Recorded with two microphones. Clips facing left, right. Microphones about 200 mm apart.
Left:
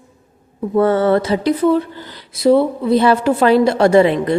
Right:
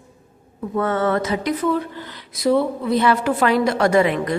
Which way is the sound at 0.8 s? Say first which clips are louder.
Left 6 dB; 30° left (ahead or behind).